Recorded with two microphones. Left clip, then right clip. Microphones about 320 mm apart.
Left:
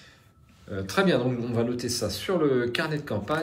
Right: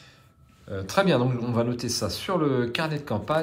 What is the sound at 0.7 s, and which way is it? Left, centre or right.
A man's voice, centre.